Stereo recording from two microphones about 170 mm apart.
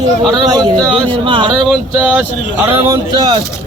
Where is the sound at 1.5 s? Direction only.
5° right (ahead or behind).